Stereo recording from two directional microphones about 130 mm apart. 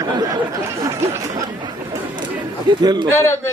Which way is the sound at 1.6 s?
35° right (ahead or behind).